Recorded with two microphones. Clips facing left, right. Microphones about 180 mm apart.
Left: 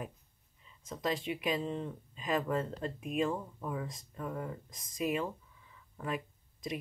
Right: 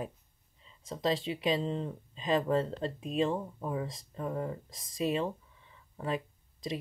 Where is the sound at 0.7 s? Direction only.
30° right (ahead or behind).